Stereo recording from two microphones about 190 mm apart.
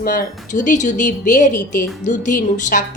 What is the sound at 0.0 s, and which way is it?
A woman's voice, 50° left (ahead or behind).